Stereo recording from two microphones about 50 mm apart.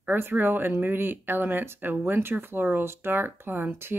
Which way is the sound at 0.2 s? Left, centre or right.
Right.